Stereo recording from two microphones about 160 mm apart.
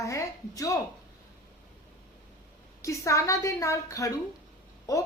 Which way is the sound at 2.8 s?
20° left (ahead or behind).